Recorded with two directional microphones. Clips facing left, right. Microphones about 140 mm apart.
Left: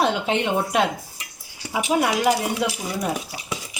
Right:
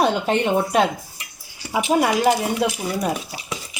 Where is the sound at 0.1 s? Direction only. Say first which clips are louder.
Right 3 dB; 45° right (ahead or behind).